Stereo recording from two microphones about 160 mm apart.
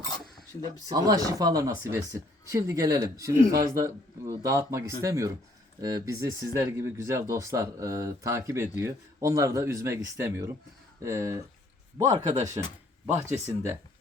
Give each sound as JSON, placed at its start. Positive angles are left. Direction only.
{"t": 0.9, "sound": "speech", "side_deg": -25}
{"t": 12.3, "sound": "speech", "side_deg": -50}
{"t": 13.2, "sound": "speech", "side_deg": -20}